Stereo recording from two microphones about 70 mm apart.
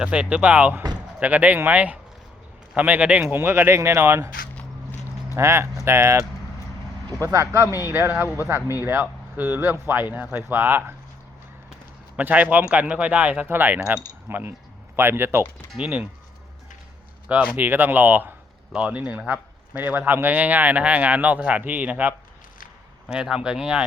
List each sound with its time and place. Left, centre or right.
0.0 s a man's voice: centre
3.3 s speech: right
5.3 s a man's voice: right
12.1 s a man's voice: right
15.8 s a man's voice: right
17.2 s speech: centre
17.6 s a man's voice: right
18.7 s a man's voice: centre
23.0 s speech: centre